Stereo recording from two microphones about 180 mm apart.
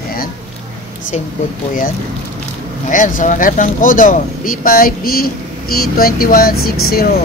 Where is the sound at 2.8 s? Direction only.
45° left (ahead or behind).